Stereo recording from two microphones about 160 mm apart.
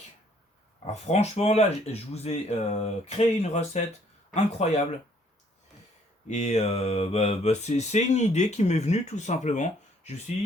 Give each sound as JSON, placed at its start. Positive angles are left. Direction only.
{"t": 0.9, "sound": "speech", "side_deg": 45}
{"t": 6.2, "sound": "mantra", "side_deg": 45}